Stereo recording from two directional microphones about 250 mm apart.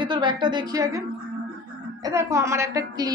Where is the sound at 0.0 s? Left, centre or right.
Centre.